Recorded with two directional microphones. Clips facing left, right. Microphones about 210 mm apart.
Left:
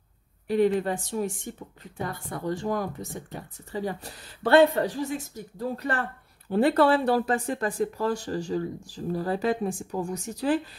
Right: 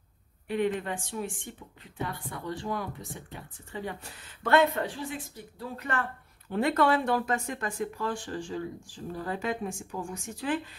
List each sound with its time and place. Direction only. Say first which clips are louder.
0.5 s speech: left 6 dB; 35° left (ahead or behind)